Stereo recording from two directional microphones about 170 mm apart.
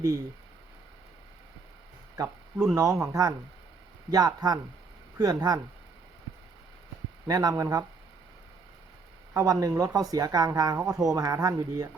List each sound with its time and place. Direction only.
2.2 s speech: 20° right (ahead or behind)
7.3 s speech: 20° right (ahead or behind)
9.3 s speech: 20° right (ahead or behind)